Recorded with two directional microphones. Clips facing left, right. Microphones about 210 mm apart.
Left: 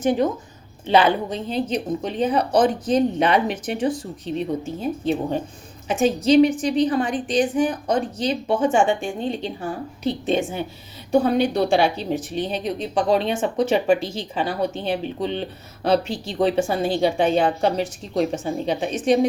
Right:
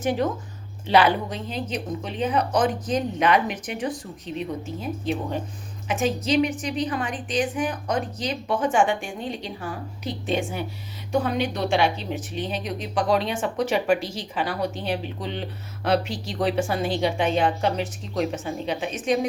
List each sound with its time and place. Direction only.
0.0 s a woman's voice: 20° left (ahead or behind)
5.9 s a woman's voice: 30° left (ahead or behind)